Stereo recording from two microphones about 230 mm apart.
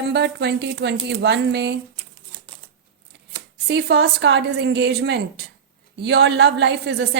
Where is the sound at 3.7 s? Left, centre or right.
Right.